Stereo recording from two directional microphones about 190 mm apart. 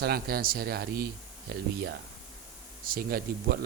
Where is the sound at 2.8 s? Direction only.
50° right (ahead or behind).